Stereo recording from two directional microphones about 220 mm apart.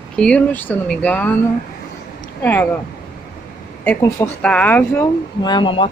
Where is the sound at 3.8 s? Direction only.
5° left (ahead or behind).